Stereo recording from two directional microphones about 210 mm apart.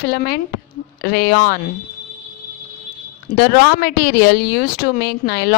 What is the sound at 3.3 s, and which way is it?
A woman's voice, 45° left (ahead or behind).